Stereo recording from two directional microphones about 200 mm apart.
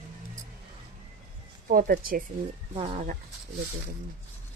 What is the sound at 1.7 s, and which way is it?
Speech, 45° right (ahead or behind).